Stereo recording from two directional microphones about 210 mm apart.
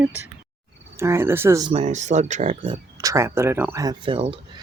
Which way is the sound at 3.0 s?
15° right (ahead or behind).